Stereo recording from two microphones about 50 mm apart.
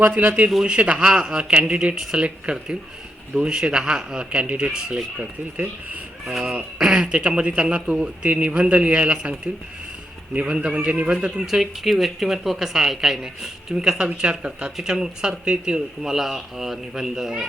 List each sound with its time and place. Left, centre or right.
0.2 s speech: right
0.6 s a man's voice: centre
6.4 s a man's voice: right
6.8 s a man's voice: centre
10.4 s a man's voice: right
11.4 s speech: centre
14.2 s a man's voice: centre